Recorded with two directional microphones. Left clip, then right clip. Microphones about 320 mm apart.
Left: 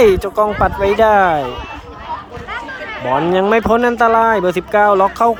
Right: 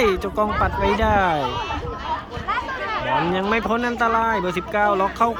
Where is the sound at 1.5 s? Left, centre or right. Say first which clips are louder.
Even; right.